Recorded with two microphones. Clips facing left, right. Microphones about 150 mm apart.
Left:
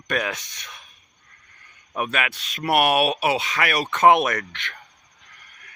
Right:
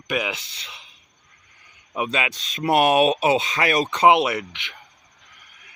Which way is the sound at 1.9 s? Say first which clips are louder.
Right 1 dB; 15° right (ahead or behind).